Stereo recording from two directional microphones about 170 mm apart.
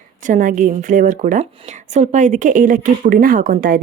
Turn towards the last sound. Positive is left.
turn(degrees=-50)  # may be behind; listen again after turning